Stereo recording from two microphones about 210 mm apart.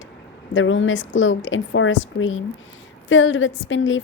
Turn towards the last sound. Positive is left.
turn(degrees=65)  # may be behind; listen again after turning